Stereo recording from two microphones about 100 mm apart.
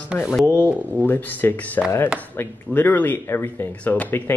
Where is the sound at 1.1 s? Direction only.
20° left (ahead or behind).